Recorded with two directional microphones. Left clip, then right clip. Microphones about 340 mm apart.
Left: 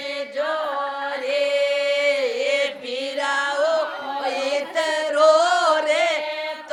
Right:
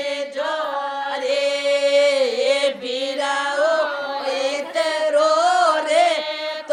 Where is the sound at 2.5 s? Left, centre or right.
Centre.